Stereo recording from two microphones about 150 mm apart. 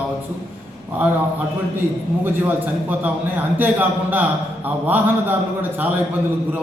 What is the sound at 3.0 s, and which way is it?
A man's voice, 10° right (ahead or behind).